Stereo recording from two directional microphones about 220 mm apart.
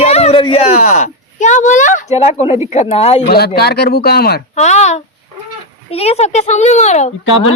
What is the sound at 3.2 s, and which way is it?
Speech, 45° left (ahead or behind).